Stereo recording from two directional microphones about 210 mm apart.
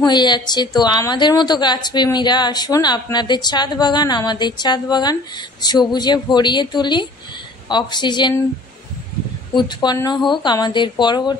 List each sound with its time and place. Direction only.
0.0 s a woman's voice: 20° left (ahead or behind)
9.6 s a woman's voice: 20° left (ahead or behind)